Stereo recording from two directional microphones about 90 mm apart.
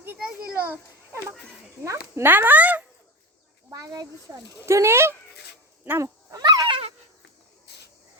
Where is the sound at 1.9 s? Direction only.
25° right (ahead or behind).